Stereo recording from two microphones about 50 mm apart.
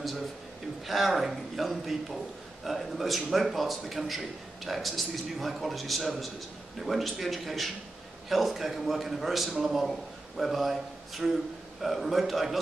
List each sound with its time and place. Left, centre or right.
0.8 s a man's voice: centre